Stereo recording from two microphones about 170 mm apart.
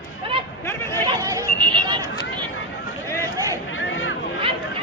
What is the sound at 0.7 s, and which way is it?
Speech, 15° left (ahead or behind).